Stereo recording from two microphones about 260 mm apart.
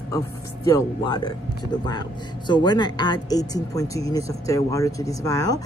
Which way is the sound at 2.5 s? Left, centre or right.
Centre.